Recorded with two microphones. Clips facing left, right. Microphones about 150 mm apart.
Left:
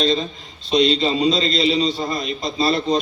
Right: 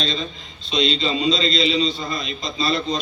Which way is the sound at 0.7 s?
45° left (ahead or behind).